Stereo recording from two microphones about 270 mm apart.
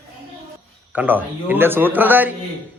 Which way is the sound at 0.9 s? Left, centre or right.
Centre.